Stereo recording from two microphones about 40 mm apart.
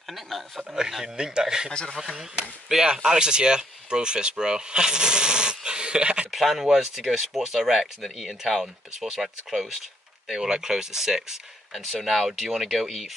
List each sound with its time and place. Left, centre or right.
0.0 s speech: centre
0.7 s speech: centre
1.7 s speech: left
2.7 s speech: centre
6.3 s speech: centre
8.0 s speech: centre
8.5 s speech: centre